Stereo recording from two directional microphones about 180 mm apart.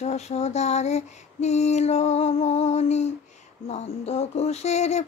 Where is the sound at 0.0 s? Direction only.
40° left (ahead or behind).